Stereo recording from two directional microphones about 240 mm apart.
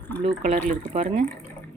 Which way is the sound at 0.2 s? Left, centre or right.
Right.